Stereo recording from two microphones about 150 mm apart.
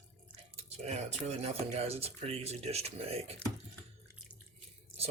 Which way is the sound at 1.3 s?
45° right (ahead or behind).